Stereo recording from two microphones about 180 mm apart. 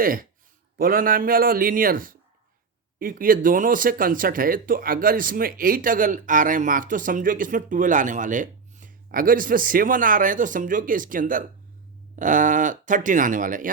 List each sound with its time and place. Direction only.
0.0 s speech: 50° right (ahead or behind)